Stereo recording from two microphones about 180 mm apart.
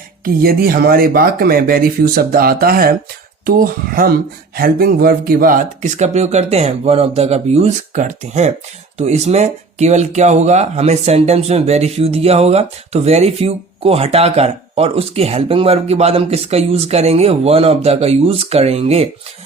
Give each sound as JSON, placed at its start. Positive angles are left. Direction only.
{"t": 0.4, "sound": "speech", "side_deg": -55}